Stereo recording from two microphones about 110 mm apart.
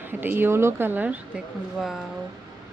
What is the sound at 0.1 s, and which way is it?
A woman's voice, 20° right (ahead or behind).